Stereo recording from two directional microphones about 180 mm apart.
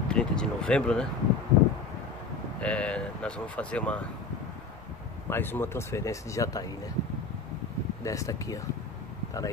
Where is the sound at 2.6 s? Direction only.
5° left (ahead or behind).